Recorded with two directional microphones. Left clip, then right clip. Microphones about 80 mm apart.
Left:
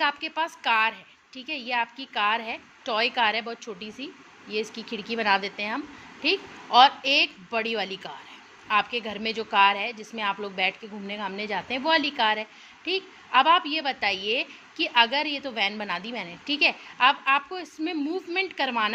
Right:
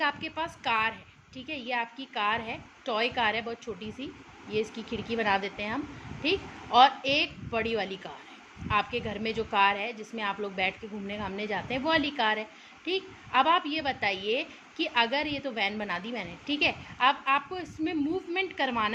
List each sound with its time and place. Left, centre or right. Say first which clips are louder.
0.0 s a woman's voice: left 4 dB; left